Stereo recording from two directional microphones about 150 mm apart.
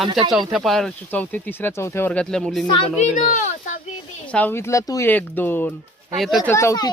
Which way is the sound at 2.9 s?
55° left (ahead or behind).